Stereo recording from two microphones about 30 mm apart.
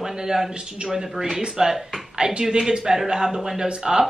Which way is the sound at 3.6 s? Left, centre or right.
Right.